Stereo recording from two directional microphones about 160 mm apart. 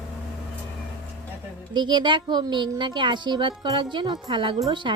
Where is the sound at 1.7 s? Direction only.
30° right (ahead or behind).